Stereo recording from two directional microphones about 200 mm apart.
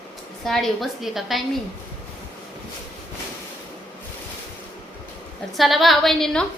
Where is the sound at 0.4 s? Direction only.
Centre (ahead or behind).